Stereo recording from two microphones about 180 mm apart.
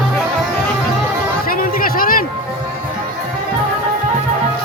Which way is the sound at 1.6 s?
50° left (ahead or behind).